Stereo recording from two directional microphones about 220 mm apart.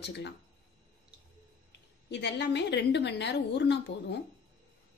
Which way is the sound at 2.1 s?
50° left (ahead or behind).